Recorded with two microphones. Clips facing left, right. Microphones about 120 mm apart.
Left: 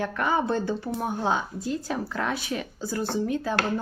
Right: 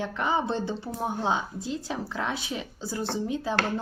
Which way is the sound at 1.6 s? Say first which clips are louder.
Left 3 dB; 50° left (ahead or behind).